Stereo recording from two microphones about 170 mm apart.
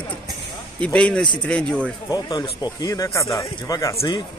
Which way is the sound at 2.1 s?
20° left (ahead or behind).